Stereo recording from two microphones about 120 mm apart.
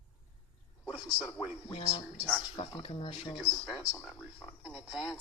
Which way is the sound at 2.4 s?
45° left (ahead or behind).